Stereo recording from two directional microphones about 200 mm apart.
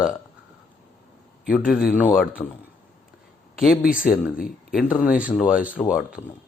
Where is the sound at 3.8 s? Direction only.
45° left (ahead or behind).